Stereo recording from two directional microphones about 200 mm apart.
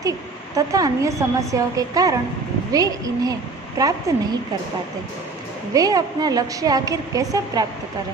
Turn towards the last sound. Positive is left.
turn(degrees=-15)  # may be behind; listen again after turning